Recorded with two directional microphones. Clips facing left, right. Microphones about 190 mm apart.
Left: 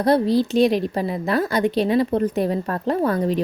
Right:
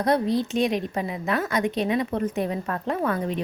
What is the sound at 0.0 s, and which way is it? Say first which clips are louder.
A woman's voice: left 5 dB; 35° left (ahead or behind).